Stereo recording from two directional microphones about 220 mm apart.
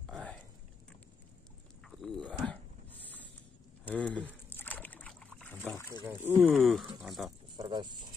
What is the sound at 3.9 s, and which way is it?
Boat, 5° left (ahead or behind).